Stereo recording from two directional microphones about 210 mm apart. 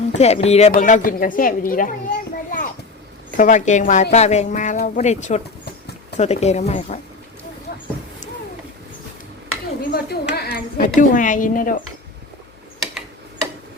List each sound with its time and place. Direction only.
0.1 s a woman's voice: 30° left (ahead or behind)
9.9 s a woman's voice: 50° left (ahead or behind)